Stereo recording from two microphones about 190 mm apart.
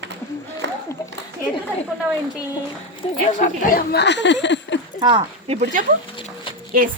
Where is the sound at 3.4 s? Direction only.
45° left (ahead or behind).